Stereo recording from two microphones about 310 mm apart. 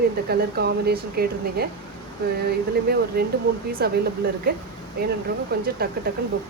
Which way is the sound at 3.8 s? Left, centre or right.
Right.